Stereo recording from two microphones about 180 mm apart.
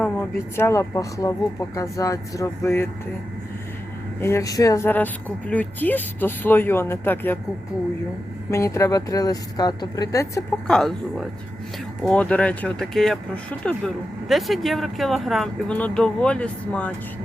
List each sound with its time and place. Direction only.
0.0 s speech: 10° left (ahead or behind)
4.2 s speech: 15° left (ahead or behind)
8.4 s speech: 15° left (ahead or behind)
10.7 s speech: 5° left (ahead or behind)